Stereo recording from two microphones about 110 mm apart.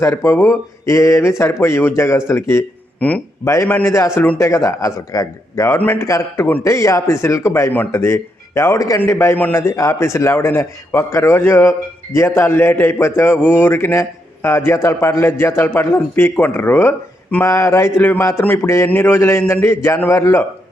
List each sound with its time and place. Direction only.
0.0 s a man's voice: 25° left (ahead or behind)
3.0 s a man's voice: 10° left (ahead or behind)
3.4 s a man's voice: 25° left (ahead or behind)
3.7 s a man's voice: 15° left (ahead or behind)
3.9 s a man's voice: 25° left (ahead or behind)